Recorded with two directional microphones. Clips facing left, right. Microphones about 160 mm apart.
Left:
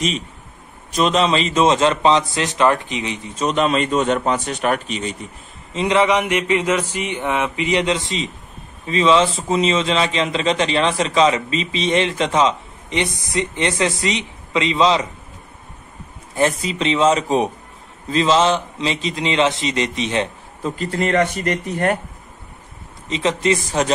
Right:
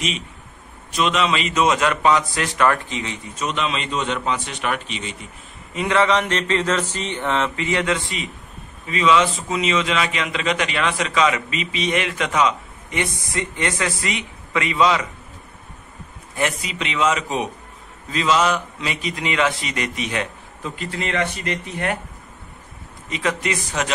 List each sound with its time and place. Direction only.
0.9 s a man's voice: 35° left (ahead or behind); by 3.3 s 20° left (ahead or behind)
3.3 s a man's voice: 40° left (ahead or behind)
5.7 s a man's voice: 20° left (ahead or behind)
16.3 s a man's voice: 30° left (ahead or behind)
20.7 s a man's voice: 40° left (ahead or behind)
23.0 s a man's voice: 25° left (ahead or behind)